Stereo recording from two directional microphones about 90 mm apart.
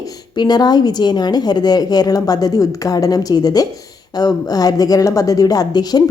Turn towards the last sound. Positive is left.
turn(degrees=50)  # may be behind; listen again after turning